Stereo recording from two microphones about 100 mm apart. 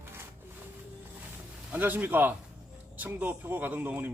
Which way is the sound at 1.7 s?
15° right (ahead or behind).